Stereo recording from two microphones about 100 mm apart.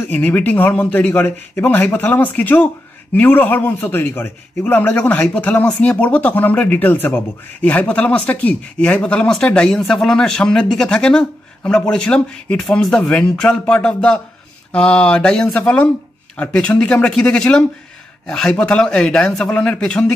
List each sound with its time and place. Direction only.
0.1 s a man's voice: 15° left (ahead or behind)